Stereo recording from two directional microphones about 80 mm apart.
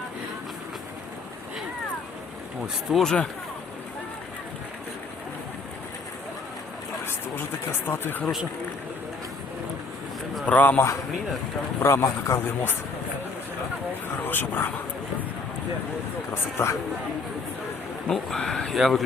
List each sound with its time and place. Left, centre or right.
2.9 s speech: centre
7.0 s speech: left
10.4 s speech: left
14.3 s speech: left
16.3 s speech: left
18.1 s speech: centre